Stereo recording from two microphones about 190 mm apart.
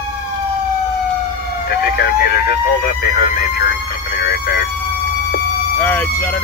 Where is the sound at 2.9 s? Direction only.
50° left (ahead or behind).